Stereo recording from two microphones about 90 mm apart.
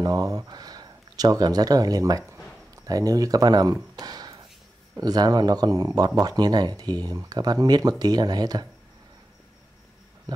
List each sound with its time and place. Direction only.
0.0 s speech: 45° right (ahead or behind)
4.0 s a sound: 45° right (ahead or behind)
5.0 s speech: 50° right (ahead or behind)